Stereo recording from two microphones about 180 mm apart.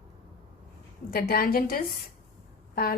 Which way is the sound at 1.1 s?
60° left (ahead or behind).